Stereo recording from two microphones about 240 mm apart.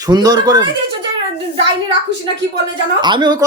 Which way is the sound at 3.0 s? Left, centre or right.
Centre.